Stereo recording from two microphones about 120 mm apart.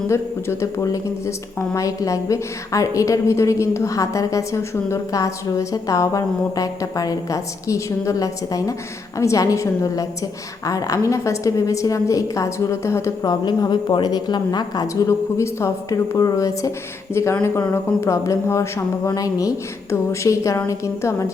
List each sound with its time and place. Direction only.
0.1 s a woman's voice: 25° left (ahead or behind)
13.4 s a woman's voice: 40° left (ahead or behind); by 21.2 s 25° left (ahead or behind)